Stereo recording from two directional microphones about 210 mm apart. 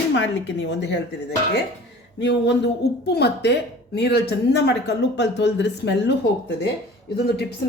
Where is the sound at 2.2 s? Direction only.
55° left (ahead or behind).